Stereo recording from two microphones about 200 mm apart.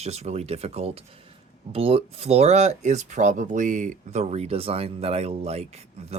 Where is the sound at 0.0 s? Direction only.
30° right (ahead or behind).